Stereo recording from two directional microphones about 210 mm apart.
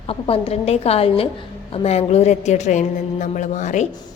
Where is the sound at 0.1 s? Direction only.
25° left (ahead or behind).